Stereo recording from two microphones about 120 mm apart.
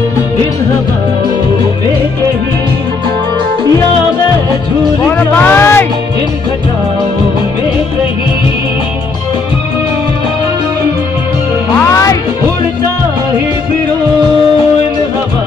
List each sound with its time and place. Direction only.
5.0 s speech: 15° left (ahead or behind)
11.9 s music: 25° left (ahead or behind)